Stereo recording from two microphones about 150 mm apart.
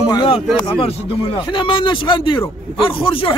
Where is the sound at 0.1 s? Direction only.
30° left (ahead or behind).